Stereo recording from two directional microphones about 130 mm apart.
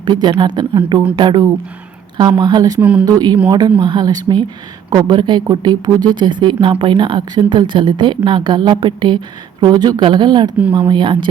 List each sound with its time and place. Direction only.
0.0 s speech: 35° right (ahead or behind)